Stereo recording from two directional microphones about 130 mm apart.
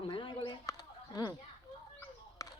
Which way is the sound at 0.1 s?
40° left (ahead or behind).